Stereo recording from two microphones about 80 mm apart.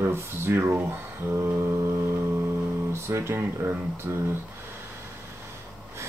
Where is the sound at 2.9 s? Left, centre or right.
Right.